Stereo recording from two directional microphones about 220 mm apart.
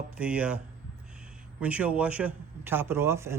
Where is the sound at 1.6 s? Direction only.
5° right (ahead or behind).